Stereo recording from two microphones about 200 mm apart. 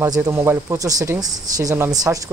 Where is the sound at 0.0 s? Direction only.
15° right (ahead or behind).